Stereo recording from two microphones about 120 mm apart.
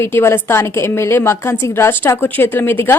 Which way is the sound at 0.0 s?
20° left (ahead or behind).